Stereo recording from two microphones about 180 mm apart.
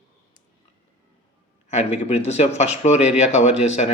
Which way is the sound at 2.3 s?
40° left (ahead or behind).